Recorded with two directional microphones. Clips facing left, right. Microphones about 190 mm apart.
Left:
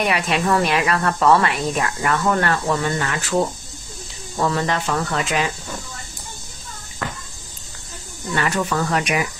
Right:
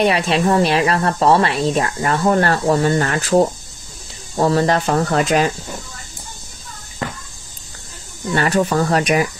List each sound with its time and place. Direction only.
0.0 s speech: 30° right (ahead or behind)
8.4 s speech: 35° right (ahead or behind)